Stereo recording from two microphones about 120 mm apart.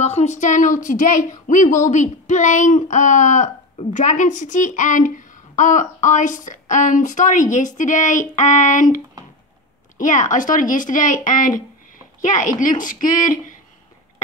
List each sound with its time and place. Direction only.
0.0 s speech: 65° left (ahead or behind); by 13.6 s 90° left